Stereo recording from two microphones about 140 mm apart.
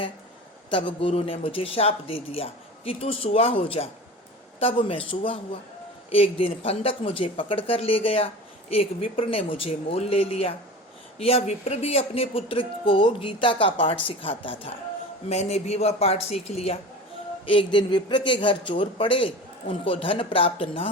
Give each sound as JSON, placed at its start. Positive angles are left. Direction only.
{"t": 0.7, "sound": "speech", "side_deg": 40}
{"t": 15.3, "sound": "speech", "side_deg": 50}